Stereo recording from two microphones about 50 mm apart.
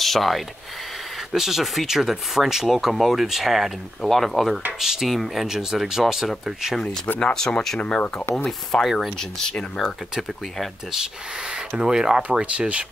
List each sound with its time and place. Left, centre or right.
0.0 s speech: centre
7.2 s speech: centre
7.8 s speech: left
8.5 s speech: centre
9.2 s speech: centre
10.1 s speech: centre
12.2 s speech: right